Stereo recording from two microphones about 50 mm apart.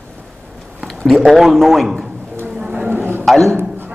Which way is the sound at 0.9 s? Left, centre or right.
Centre.